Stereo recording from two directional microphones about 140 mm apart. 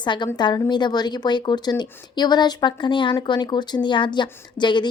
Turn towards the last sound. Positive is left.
turn(degrees=35)  # may be behind; listen again after turning